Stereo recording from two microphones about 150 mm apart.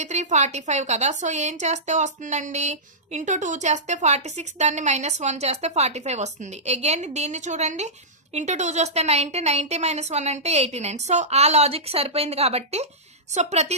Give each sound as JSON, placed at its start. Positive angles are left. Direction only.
{"t": 0.0, "sound": "a woman's voice", "side_deg": -50}